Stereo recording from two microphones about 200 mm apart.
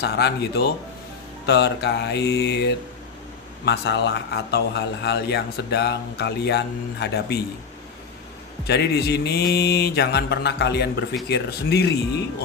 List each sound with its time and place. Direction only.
0.0 s a man's voice: 55° left (ahead or behind)
3.7 s a man's voice: 60° left (ahead or behind)
8.6 s a man's voice: 55° left (ahead or behind)